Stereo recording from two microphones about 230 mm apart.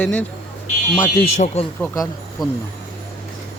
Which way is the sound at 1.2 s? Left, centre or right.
Left.